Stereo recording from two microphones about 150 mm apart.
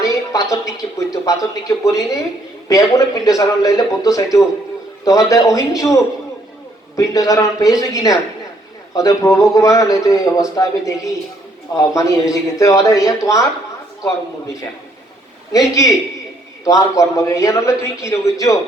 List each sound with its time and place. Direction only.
0.0 s a sound: 20° left (ahead or behind)
0.5 s speech: 20° left (ahead or behind)
15.5 s speech: 20° left (ahead or behind)